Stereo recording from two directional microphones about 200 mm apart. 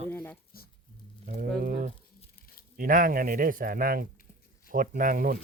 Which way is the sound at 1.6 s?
45° right (ahead or behind).